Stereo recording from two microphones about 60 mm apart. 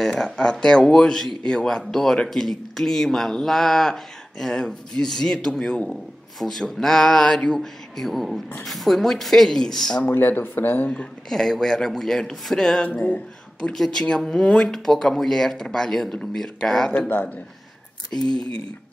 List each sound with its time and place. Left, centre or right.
0.0 s speech: centre
10.0 s speech: left
11.2 s speech: centre
12.8 s speech: left
13.6 s speech: centre